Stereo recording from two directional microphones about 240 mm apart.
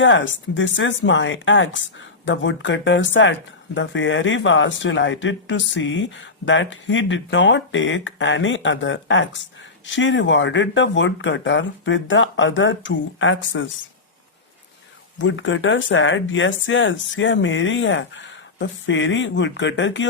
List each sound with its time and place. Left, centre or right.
0.0 s speech: left
15.2 s speech: left